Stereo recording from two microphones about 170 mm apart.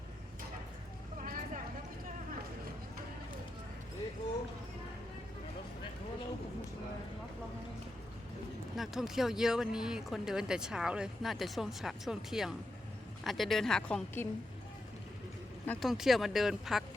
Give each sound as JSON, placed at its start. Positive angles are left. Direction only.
{"t": 1.2, "sound": "vehicle", "side_deg": -50}
{"t": 8.7, "sound": "speech", "side_deg": 0}
{"t": 15.6, "sound": "speech", "side_deg": 10}
{"t": 15.9, "sound": "speech", "side_deg": 0}